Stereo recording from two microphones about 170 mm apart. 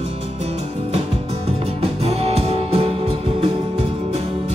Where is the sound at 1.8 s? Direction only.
35° right (ahead or behind).